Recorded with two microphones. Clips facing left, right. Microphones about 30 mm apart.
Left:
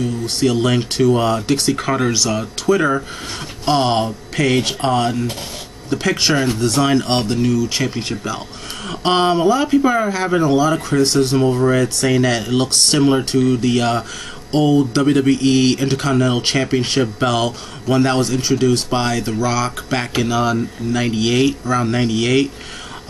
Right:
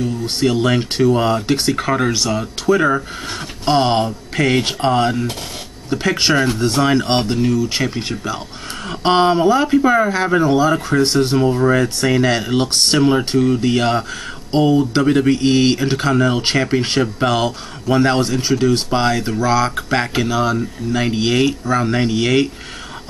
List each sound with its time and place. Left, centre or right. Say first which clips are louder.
0.0 s speech: even; centre
7.9 s speech: even; centre
13.2 s speech: even; right